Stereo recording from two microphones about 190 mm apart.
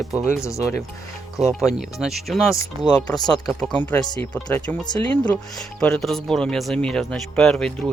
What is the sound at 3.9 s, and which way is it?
Speech, 15° left (ahead or behind).